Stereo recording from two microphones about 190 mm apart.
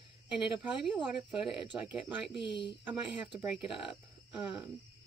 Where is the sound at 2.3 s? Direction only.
25° left (ahead or behind).